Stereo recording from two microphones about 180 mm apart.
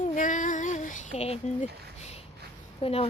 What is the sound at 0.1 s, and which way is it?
Child singing, 45° left (ahead or behind).